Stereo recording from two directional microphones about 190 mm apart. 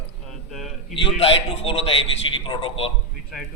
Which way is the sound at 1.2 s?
30° left (ahead or behind).